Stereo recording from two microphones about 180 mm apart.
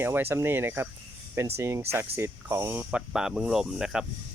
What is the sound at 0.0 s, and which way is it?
Speech, 10° right (ahead or behind).